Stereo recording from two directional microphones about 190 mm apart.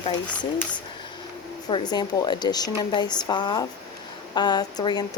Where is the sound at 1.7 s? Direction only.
25° left (ahead or behind).